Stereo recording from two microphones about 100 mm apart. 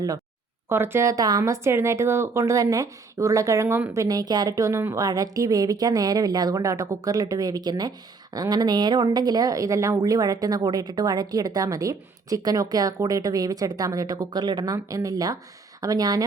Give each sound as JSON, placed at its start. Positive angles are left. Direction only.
{"t": 0.7, "sound": "a woman's voice", "side_deg": -25}
{"t": 4.0, "sound": "a woman's voice", "side_deg": -40}